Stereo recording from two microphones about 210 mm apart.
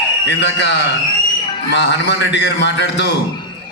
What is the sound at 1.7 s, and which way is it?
A man's voice, 55° left (ahead or behind).